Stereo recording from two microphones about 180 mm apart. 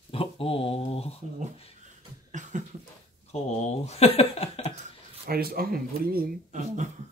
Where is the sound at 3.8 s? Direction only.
35° left (ahead or behind).